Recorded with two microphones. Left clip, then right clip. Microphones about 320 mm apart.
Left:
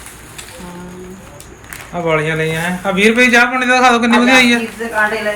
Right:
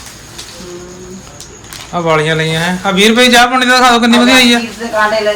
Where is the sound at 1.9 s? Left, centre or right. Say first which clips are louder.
Right 4 dB; centre.